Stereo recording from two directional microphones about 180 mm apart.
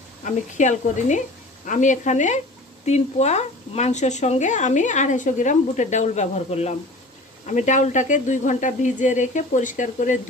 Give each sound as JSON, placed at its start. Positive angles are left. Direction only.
{"t": 0.2, "sound": "speech", "side_deg": 45}